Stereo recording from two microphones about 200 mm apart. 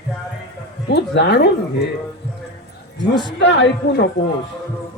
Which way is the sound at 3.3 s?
60° left (ahead or behind).